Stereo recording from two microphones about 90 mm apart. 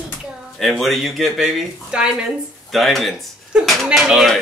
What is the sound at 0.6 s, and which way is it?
Speech, centre (ahead or behind).